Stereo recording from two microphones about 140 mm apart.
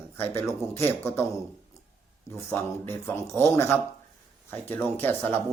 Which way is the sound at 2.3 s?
15° left (ahead or behind).